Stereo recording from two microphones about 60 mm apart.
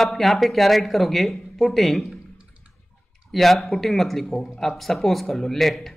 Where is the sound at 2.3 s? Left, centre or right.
Centre.